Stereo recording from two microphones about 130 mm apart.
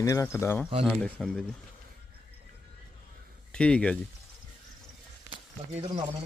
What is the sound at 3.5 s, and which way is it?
Speech, 10° left (ahead or behind).